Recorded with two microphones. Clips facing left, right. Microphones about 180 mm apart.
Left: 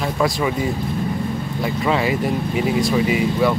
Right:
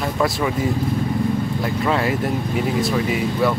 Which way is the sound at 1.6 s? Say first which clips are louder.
Left 2 dB; centre (ahead or behind).